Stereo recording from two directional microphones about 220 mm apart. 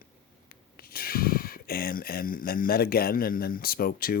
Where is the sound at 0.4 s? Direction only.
45° left (ahead or behind).